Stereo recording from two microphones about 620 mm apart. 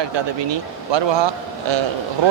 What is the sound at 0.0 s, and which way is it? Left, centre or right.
Speech, right.